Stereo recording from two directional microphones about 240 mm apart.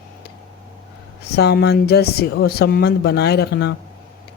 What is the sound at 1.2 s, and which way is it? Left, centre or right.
Speech, left.